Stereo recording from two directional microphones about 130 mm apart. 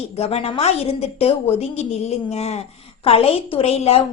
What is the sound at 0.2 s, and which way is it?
A woman's voice, 55° left (ahead or behind).